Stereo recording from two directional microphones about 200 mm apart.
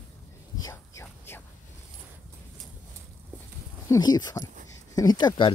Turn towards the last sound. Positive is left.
turn(degrees=20)  # may be behind; listen again after turning